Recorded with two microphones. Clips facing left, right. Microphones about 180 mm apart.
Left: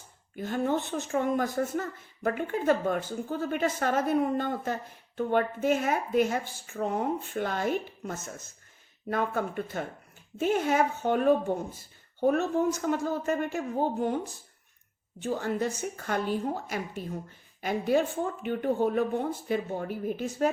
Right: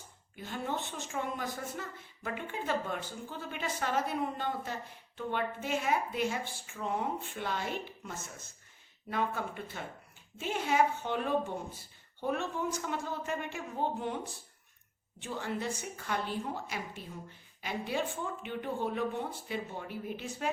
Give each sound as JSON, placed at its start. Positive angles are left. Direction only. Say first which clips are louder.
{"t": 0.3, "sound": "a woman's voice", "louder": "left 9 dB", "side_deg": 50}
{"t": 15.2, "sound": "a woman's voice", "louder": "left 7 dB", "side_deg": 45}